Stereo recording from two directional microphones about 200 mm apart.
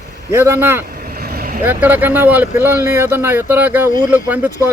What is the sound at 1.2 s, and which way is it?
Vehicle, 50° right (ahead or behind).